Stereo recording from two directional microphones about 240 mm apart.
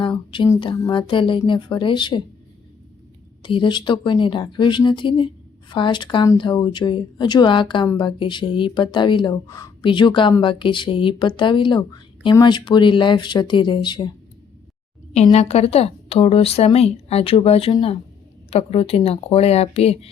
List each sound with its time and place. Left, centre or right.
0.0 s speech: left
3.4 s speech: left
15.1 s speech: left